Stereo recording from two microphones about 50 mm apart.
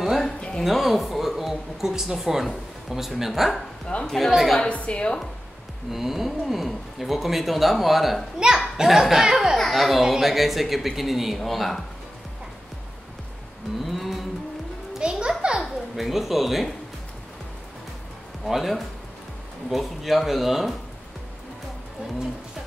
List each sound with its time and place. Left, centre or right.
0.0 s a sound: centre
0.4 s a sound: centre
0.7 s a woman's voice: centre
4.6 s a woman's voice: left
5.9 s speech: centre
8.4 s a child's voice: centre
9.6 s speech: centre
13.8 s cattle: centre
15.0 s music: centre
15.6 s speech: centre
18.4 s speech: centre